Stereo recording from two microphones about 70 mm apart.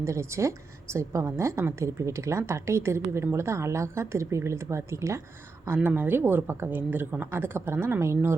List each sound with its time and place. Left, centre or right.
0.0 s speech: right
5.6 s a woman's voice: right